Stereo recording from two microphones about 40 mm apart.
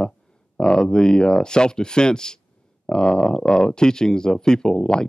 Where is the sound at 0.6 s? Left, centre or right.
Centre.